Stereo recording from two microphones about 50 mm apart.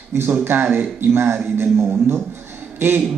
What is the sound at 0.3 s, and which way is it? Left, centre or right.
Speech, right.